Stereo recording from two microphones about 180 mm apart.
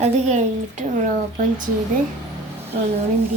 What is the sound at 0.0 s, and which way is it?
A woman's voice, 40° right (ahead or behind).